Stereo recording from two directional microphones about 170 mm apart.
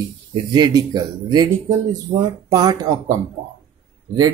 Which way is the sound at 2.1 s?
55° right (ahead or behind).